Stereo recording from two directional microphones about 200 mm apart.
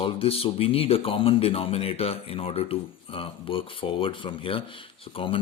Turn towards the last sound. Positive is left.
turn(degrees=25)  # may be behind; listen again after turning